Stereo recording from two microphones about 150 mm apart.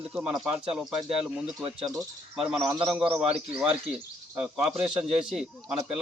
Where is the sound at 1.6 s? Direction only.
30° right (ahead or behind).